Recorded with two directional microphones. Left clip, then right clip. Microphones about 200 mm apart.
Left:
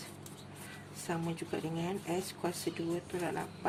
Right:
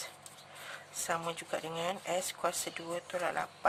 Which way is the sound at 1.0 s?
40° right (ahead or behind).